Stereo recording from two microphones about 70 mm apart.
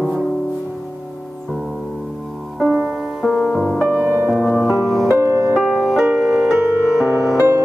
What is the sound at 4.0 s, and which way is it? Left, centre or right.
Music, right.